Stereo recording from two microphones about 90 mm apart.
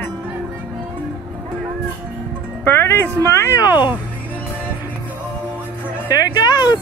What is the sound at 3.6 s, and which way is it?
Speech, 50° left (ahead or behind).